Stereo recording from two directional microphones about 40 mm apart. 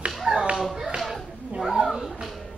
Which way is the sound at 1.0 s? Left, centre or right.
Centre.